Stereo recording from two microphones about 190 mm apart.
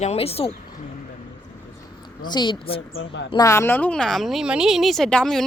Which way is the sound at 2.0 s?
25° left (ahead or behind).